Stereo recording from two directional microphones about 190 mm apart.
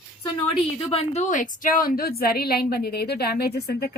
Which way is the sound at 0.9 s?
35° left (ahead or behind).